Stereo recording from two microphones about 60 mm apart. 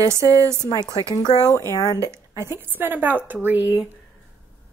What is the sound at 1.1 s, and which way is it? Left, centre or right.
Speech, left.